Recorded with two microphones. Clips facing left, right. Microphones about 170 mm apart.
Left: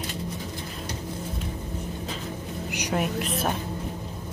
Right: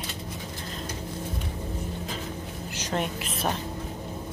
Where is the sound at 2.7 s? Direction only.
15° left (ahead or behind).